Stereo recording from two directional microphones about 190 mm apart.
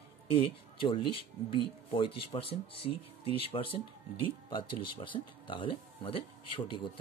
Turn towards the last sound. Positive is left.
turn(degrees=25)  # may be behind; listen again after turning